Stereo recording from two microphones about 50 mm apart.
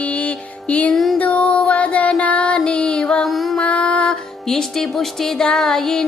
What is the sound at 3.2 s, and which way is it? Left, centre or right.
Music, centre.